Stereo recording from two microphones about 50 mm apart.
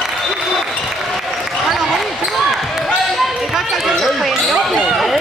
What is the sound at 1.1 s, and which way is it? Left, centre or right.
Basketball bounce, centre.